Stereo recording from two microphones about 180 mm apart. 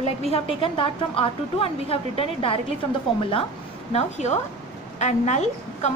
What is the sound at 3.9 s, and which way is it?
A woman's voice, 40° left (ahead or behind).